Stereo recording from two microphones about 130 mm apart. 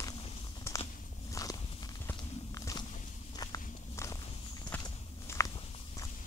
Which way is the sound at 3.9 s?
20° left (ahead or behind).